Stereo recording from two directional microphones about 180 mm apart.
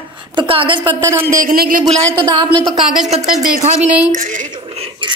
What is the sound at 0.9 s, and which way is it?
Speech, 15° right (ahead or behind).